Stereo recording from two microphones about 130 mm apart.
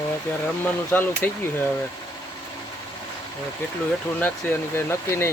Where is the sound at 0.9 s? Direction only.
15° left (ahead or behind).